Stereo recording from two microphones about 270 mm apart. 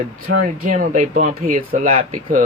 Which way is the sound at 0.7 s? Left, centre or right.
Right.